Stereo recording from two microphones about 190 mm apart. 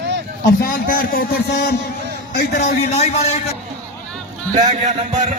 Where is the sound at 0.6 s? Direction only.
50° left (ahead or behind).